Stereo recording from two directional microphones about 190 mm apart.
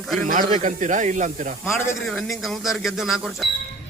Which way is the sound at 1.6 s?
Centre (ahead or behind).